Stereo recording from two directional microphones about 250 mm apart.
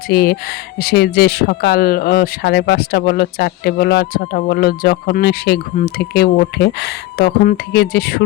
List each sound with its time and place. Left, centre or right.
0.1 s speech: left